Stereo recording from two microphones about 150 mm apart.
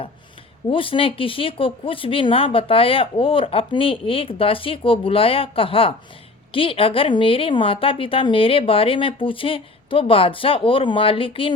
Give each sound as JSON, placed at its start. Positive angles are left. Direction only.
{"t": 0.7, "sound": "speech", "side_deg": 35}